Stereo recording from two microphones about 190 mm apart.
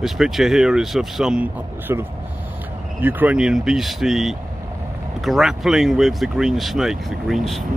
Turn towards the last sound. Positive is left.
turn(degrees=0)  # may be behind; listen again after turning